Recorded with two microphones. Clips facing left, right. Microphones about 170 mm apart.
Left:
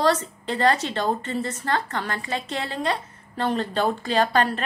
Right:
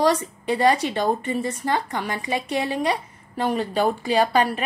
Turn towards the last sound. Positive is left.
turn(degrees=-10)  # may be behind; listen again after turning